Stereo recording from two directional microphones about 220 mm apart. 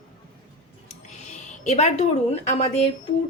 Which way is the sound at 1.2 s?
30° left (ahead or behind).